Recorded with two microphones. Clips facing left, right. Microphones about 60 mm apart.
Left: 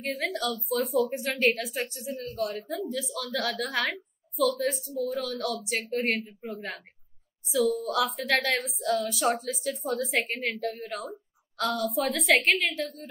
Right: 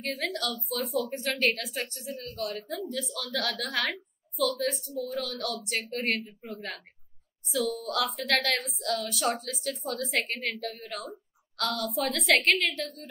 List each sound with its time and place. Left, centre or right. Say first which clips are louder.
0.0 s a woman's voice: left 2 dB; centre